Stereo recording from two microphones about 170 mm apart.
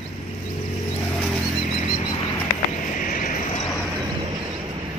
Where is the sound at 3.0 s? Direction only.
50° left (ahead or behind).